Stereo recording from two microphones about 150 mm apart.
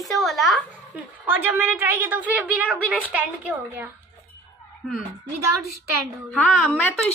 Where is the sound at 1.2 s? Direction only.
15° right (ahead or behind).